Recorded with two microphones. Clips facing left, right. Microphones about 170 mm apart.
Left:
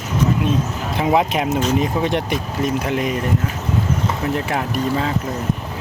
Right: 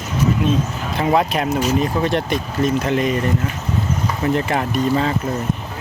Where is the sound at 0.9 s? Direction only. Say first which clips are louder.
Even; 10° left (ahead or behind).